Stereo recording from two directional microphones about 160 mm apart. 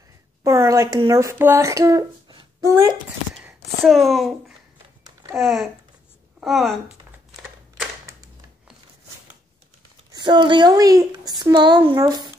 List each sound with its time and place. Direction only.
0.4 s speech: 20° right (ahead or behind)
3.8 s speech: centre (ahead or behind)
10.1 s speech: 30° right (ahead or behind)